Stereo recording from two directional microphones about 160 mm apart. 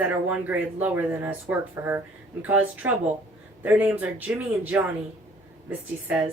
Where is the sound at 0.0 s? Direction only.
10° right (ahead or behind).